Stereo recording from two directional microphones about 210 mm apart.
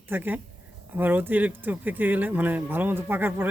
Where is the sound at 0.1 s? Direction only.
10° right (ahead or behind).